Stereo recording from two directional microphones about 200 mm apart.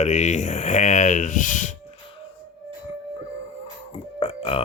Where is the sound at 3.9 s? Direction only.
30° left (ahead or behind).